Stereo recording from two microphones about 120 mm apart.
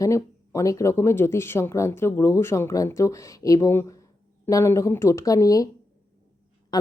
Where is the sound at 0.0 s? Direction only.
25° left (ahead or behind).